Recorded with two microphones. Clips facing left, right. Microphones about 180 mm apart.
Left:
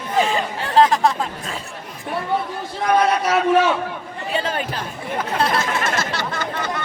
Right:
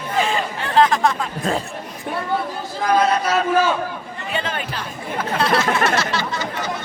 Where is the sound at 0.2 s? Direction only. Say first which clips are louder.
Left 2 dB; 40° left (ahead or behind).